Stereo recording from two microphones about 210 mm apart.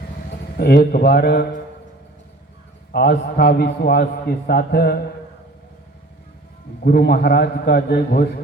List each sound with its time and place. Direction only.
0.5 s a man's voice: 50° left (ahead or behind)
2.9 s a man's voice: 45° left (ahead or behind)
6.8 s a man's voice: 45° left (ahead or behind)